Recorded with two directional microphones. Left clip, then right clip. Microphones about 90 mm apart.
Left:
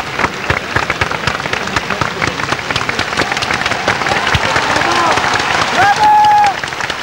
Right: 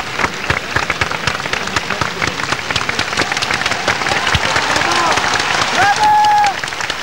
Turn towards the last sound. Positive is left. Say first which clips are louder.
# left 3 dB
turn(degrees=35)  # may be behind; listen again after turning